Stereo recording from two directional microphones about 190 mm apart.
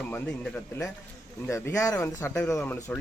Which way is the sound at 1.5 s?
15° left (ahead or behind).